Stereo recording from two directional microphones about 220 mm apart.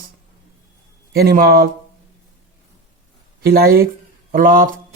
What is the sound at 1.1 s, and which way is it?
Speech, 40° right (ahead or behind).